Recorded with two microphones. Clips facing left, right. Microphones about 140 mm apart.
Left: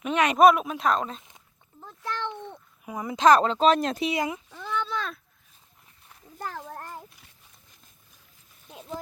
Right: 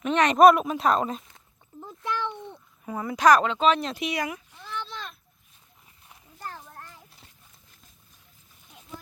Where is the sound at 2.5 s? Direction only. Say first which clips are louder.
Right 2 dB; 15° left (ahead or behind).